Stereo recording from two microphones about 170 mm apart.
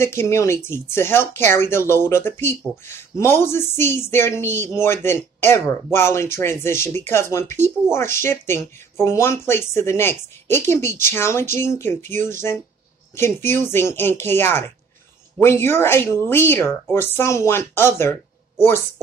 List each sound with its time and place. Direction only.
0.0 s speech: 15° left (ahead or behind)